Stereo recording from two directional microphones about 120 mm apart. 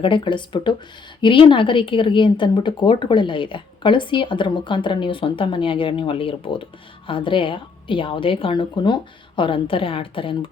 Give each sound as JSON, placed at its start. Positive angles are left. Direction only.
{"t": 0.0, "sound": "speech", "side_deg": 40}